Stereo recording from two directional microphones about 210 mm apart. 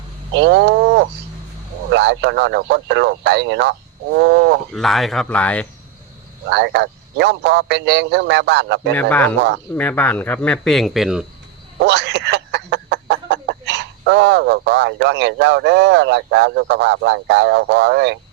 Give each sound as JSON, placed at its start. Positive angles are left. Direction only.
{"t": 0.3, "sound": "speech", "side_deg": -55}
{"t": 4.7, "sound": "speech", "side_deg": 0}
{"t": 6.5, "sound": "speech", "side_deg": -55}
{"t": 9.0, "sound": "speech", "side_deg": 10}
{"t": 11.8, "sound": "speech", "side_deg": -55}